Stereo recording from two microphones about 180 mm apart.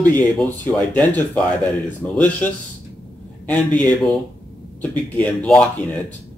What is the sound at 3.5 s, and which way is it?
Speech, 10° left (ahead or behind).